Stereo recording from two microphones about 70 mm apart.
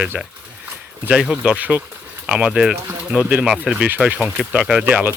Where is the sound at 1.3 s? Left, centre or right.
Centre.